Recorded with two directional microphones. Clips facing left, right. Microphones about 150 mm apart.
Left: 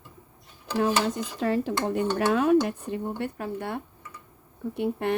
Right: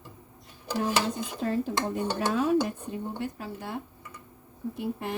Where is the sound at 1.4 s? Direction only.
75° left (ahead or behind).